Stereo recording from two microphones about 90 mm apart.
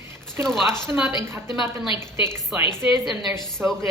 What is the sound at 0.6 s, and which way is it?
Speech, 55° left (ahead or behind).